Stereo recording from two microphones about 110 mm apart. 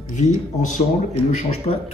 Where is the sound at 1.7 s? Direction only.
70° left (ahead or behind).